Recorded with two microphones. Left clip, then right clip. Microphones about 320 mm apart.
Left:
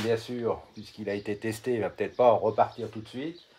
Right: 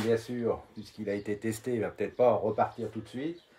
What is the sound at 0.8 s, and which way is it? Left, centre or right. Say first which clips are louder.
Speech: left 1 dB; left.